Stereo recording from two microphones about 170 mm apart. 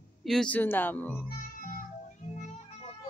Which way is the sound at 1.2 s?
55° left (ahead or behind).